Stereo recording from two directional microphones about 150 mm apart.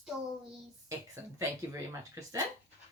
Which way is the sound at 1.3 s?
20° right (ahead or behind).